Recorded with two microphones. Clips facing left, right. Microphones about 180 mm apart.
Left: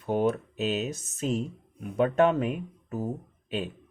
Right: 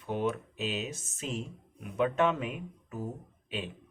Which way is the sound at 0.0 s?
40° left (ahead or behind).